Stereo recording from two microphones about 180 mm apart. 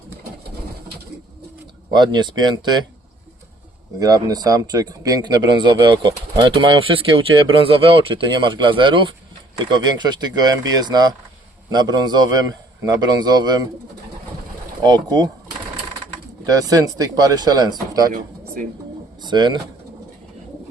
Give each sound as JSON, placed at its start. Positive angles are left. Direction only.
{"t": 1.9, "sound": "speech", "side_deg": -25}
{"t": 4.0, "sound": "speech", "side_deg": -20}
{"t": 14.8, "sound": "speech", "side_deg": -20}
{"t": 16.5, "sound": "speech", "side_deg": -20}
{"t": 18.1, "sound": "speech", "side_deg": -45}
{"t": 19.2, "sound": "speech", "side_deg": -25}